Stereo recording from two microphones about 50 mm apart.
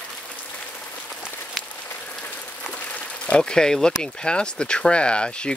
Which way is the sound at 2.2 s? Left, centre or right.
Left.